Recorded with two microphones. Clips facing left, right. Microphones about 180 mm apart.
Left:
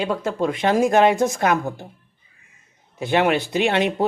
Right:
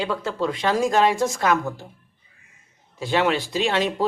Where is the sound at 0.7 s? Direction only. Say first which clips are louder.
Left 4 dB; 55° left (ahead or behind).